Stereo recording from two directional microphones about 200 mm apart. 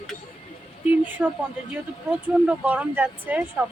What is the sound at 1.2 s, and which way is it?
A woman's voice, 10° right (ahead or behind).